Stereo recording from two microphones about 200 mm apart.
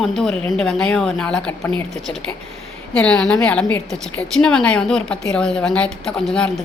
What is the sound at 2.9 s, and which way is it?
A woman's voice, 5° left (ahead or behind).